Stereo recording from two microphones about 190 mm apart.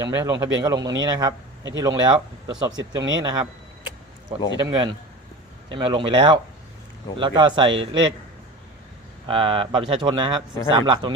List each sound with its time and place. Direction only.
0.0 s speech: 20° right (ahead or behind)
4.6 s speech: 20° right (ahead or behind)
9.2 s speech: 30° right (ahead or behind)